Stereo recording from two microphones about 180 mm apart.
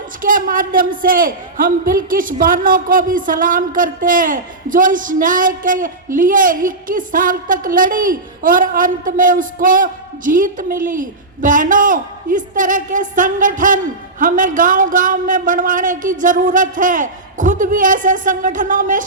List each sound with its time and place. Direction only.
0.2 s a man's voice: 50° right (ahead or behind)